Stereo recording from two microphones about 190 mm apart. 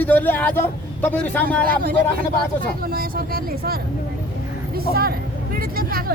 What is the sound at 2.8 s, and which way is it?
Speech, 50° right (ahead or behind).